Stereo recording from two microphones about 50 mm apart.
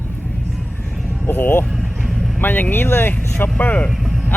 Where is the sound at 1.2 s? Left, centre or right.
Left.